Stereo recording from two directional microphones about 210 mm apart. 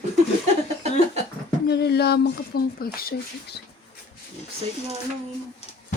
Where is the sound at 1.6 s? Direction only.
50° left (ahead or behind).